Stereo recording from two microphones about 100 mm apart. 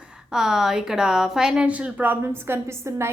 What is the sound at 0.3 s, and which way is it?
A woman's voice, 5° right (ahead or behind).